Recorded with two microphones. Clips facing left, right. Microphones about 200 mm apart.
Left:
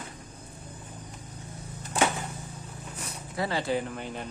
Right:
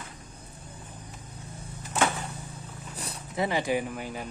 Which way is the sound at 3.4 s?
15° right (ahead or behind).